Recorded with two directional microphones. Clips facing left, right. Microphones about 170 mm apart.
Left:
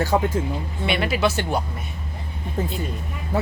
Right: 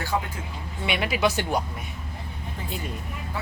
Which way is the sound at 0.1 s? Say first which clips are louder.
Left 6 dB; 35° left (ahead or behind).